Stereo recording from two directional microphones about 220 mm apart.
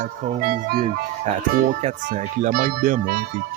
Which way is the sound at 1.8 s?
30° right (ahead or behind).